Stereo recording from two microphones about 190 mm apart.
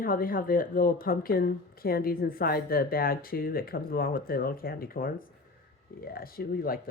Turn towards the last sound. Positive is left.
turn(degrees=50)  # may be behind; listen again after turning